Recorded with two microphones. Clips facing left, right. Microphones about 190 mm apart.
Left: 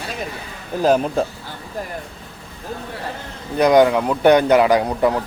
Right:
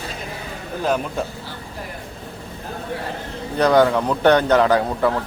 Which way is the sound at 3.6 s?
15° left (ahead or behind).